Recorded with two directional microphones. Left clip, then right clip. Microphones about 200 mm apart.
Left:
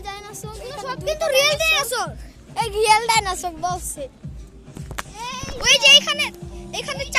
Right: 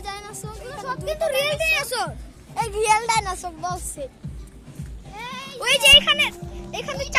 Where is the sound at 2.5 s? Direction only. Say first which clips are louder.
Left 3 dB; 10° left (ahead or behind).